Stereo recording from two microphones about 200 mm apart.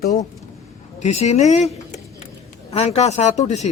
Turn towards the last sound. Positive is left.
turn(degrees=35)  # may be behind; listen again after turning